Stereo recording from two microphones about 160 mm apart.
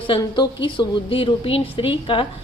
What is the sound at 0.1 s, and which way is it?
A woman's voice, 30° left (ahead or behind).